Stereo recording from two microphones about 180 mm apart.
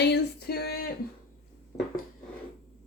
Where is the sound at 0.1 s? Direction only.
60° left (ahead or behind).